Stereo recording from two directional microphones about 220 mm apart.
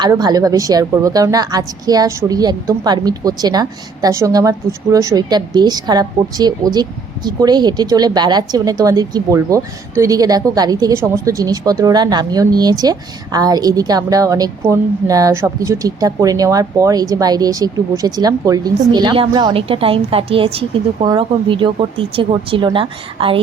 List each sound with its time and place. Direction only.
0.0 s speech: 15° right (ahead or behind)